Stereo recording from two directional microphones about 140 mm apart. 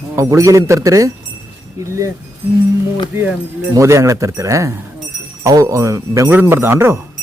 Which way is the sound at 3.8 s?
20° right (ahead or behind).